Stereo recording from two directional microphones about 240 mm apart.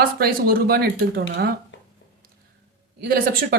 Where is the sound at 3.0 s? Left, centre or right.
Right.